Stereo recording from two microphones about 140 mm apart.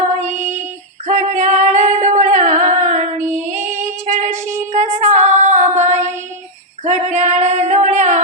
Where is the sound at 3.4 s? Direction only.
60° right (ahead or behind).